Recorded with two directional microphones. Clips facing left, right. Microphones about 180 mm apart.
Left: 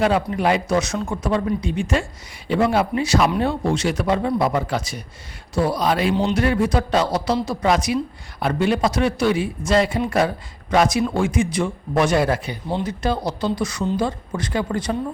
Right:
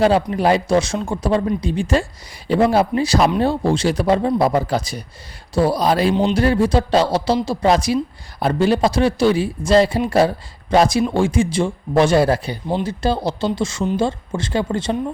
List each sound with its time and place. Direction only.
0.0 s speech: 35° right (ahead or behind)